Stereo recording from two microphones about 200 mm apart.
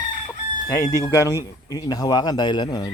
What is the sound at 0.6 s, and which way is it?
Speech, 15° left (ahead or behind).